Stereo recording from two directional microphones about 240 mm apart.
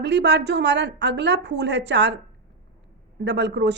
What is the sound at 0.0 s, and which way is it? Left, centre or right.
Speech, right.